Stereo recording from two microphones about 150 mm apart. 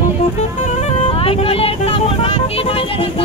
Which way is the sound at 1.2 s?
40° left (ahead or behind).